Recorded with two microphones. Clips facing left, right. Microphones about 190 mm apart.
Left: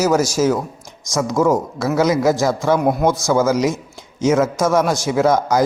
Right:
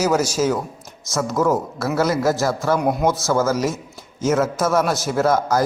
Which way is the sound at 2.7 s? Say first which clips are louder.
Left 2 dB; centre (ahead or behind).